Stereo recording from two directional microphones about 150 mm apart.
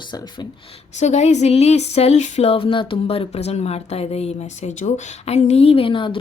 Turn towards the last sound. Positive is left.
turn(degrees=35)  # may be behind; listen again after turning